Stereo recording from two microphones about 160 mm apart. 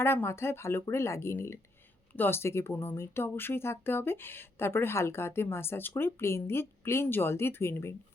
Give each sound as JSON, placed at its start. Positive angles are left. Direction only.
{"t": 0.0, "sound": "speech", "side_deg": 15}